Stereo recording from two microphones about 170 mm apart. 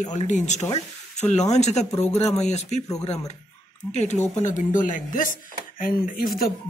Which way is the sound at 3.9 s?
40° left (ahead or behind).